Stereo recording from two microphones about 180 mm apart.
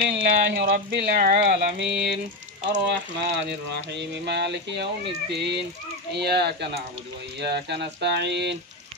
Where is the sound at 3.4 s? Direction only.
70° right (ahead or behind).